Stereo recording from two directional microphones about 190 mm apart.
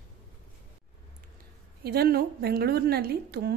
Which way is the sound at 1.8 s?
55° right (ahead or behind).